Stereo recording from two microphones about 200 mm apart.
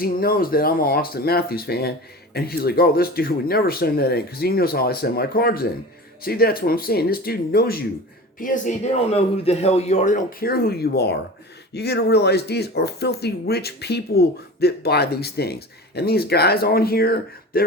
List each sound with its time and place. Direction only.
0.0 s a man's voice: 45° left (ahead or behind)